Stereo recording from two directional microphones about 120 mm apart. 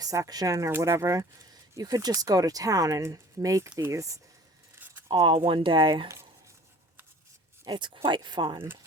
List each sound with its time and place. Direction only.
0.0 s speech: 30° right (ahead or behind)
4.7 s a sound: 15° right (ahead or behind)
5.0 s speech: 40° right (ahead or behind)
7.6 s speech: 35° right (ahead or behind)